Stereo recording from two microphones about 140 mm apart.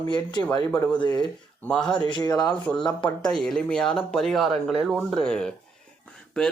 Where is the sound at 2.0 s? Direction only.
30° left (ahead or behind).